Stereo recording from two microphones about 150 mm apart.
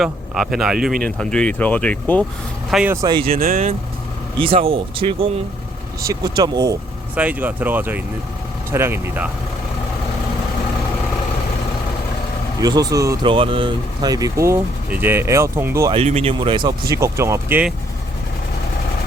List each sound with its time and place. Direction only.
0.0 s speech: centre (ahead or behind)
2.6 s speech: 5° right (ahead or behind)
2.9 s speech: 25° right (ahead or behind)
3.2 s speech: 70° right (ahead or behind)
4.4 s speech: 40° right (ahead or behind)
6.1 s speech: 25° right (ahead or behind)
7.2 s speech: 10° right (ahead or behind)
12.6 s speech: 25° right (ahead or behind)
13.2 s speech: 35° right (ahead or behind); by 15.9 s 20° right (ahead or behind)
15.9 s speech: 45° right (ahead or behind); by 17.7 s 15° right (ahead or behind)